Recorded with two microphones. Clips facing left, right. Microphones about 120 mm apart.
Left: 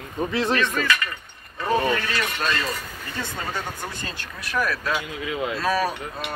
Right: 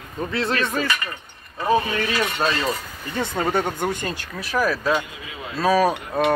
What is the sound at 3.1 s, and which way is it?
Speech, 55° right (ahead or behind).